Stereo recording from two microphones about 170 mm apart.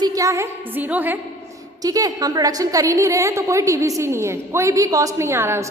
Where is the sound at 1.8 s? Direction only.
20° right (ahead or behind).